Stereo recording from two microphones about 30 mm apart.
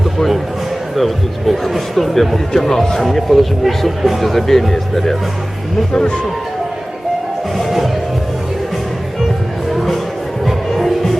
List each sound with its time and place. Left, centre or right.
0.9 s speech: centre
5.9 s speech: left
9.6 s music: centre